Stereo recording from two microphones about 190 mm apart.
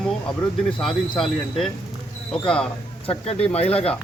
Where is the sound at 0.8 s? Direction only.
Centre (ahead or behind).